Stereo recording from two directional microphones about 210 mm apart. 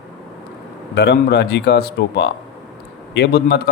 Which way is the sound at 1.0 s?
50° left (ahead or behind).